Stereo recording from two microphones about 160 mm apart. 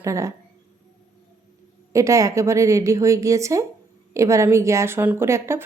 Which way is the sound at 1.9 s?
20° right (ahead or behind).